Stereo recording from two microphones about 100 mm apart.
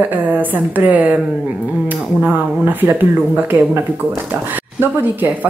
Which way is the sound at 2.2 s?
15° right (ahead or behind).